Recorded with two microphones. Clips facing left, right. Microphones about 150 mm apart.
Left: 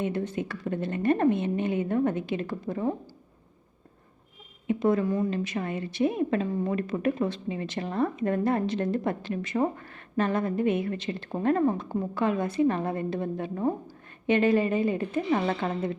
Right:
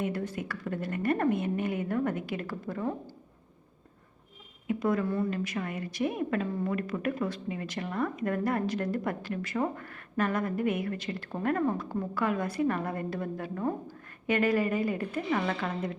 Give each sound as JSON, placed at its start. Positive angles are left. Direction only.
{"t": 0.0, "sound": "a woman's voice", "side_deg": 25}
{"t": 4.6, "sound": "a woman's voice", "side_deg": 25}